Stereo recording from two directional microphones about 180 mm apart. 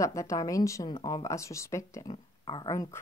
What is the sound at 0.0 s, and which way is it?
Speech, 15° left (ahead or behind).